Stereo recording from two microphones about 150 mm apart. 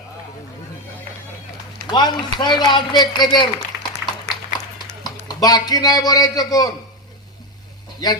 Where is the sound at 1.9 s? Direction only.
30° left (ahead or behind).